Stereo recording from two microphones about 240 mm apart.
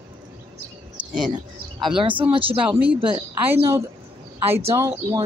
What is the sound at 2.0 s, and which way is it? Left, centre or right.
Speech, right.